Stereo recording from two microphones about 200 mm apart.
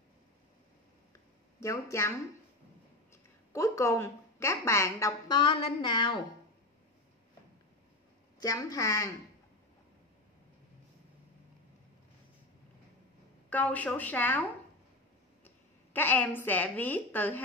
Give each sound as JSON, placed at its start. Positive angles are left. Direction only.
{"t": 1.6, "sound": "a woman's voice", "side_deg": 15}
{"t": 8.4, "sound": "a woman's voice", "side_deg": 20}
{"t": 13.5, "sound": "a woman's voice", "side_deg": 5}
{"t": 15.4, "sound": "a woman's voice", "side_deg": 10}